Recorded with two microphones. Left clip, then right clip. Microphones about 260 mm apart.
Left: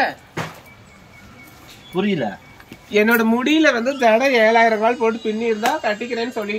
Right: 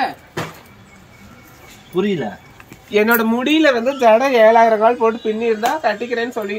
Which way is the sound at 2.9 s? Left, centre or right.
Centre.